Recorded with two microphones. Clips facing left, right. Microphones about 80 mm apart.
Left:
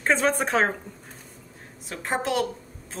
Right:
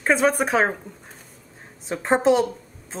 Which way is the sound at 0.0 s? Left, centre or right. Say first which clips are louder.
Right 3 dB; centre.